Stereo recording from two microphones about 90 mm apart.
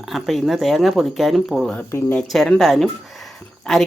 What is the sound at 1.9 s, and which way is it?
Speech, 30° left (ahead or behind).